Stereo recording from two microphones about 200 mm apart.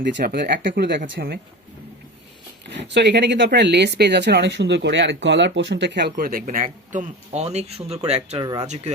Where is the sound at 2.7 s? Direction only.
60° right (ahead or behind); by 8.4 s 30° right (ahead or behind).